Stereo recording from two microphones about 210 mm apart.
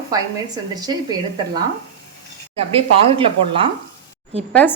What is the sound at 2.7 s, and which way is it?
Speech, 25° right (ahead or behind).